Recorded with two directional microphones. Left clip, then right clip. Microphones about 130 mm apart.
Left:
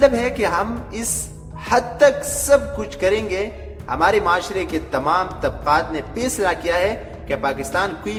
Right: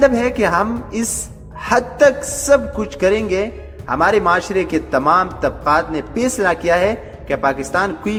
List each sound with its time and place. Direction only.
0.0 s a man's voice: 35° right (ahead or behind)